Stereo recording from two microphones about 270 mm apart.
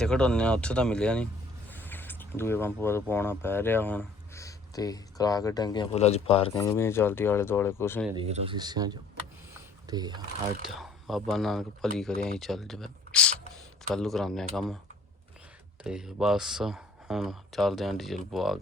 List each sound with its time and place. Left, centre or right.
0.0 s speech: centre
8.1 s speech: right
10.7 s speech: centre
15.8 s speech: centre